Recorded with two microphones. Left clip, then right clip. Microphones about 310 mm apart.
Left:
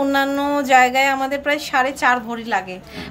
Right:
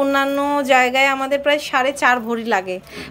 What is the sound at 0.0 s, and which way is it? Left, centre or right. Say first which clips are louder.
A woman's voice: right 1 dB; centre.